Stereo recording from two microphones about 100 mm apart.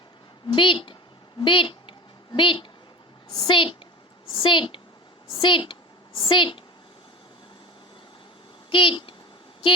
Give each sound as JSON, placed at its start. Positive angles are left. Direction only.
{"t": 0.4, "sound": "a woman's voice", "side_deg": 55}
{"t": 1.4, "sound": "a sound", "side_deg": 55}
{"t": 3.3, "sound": "a woman's voice", "side_deg": 55}
{"t": 8.7, "sound": "a child's voice", "side_deg": 60}